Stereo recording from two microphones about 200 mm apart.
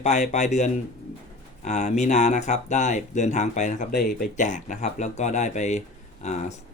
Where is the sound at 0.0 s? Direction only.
35° left (ahead or behind).